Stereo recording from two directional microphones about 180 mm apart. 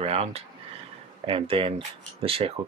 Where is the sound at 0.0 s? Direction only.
35° right (ahead or behind).